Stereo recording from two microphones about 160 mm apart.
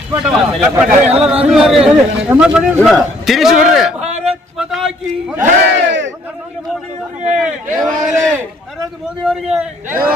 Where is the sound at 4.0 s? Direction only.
45° right (ahead or behind).